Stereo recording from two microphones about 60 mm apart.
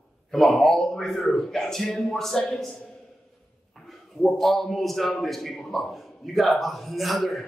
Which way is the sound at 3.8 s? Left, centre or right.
Centre.